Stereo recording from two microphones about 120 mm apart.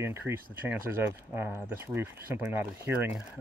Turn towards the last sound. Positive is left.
turn(degrees=-20)  # may be behind; listen again after turning